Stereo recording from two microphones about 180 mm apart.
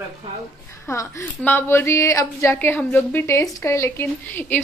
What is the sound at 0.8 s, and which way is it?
A woman's voice, 15° left (ahead or behind).